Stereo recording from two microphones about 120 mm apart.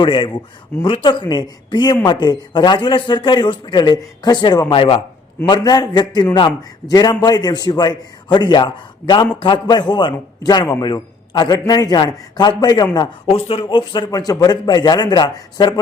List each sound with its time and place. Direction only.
0.0 s a man's voice: 45° left (ahead or behind)
5.5 s a man's voice: 35° left (ahead or behind)
13.2 s a man's voice: 50° left (ahead or behind)